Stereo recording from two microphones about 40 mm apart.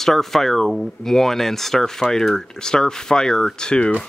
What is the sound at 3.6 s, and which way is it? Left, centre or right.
Speech, left.